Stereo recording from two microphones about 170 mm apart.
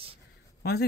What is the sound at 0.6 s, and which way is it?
Speech, 70° left (ahead or behind).